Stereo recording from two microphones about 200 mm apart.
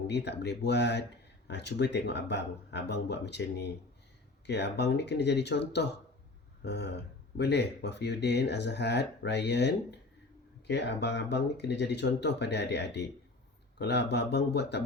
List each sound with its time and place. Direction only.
0.1 s speech: 60° left (ahead or behind)